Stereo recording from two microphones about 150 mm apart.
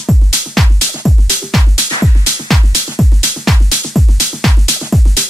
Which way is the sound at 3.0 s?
Centre (ahead or behind).